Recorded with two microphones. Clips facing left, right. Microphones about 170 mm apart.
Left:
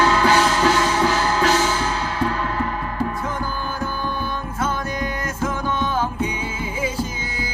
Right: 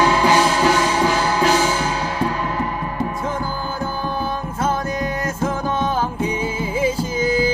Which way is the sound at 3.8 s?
30° right (ahead or behind).